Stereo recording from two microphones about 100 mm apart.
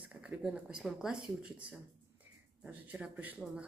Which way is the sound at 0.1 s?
10° right (ahead or behind).